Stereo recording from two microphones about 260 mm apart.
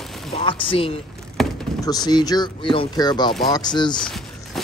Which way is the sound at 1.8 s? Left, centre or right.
Centre.